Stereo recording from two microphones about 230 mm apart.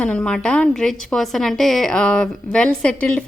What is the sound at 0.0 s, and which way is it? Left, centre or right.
A woman's voice, centre.